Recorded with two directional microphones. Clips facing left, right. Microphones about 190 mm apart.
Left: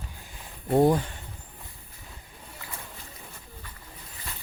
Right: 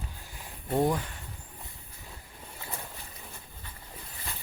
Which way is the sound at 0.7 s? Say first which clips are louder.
Left 6 dB; 30° left (ahead or behind).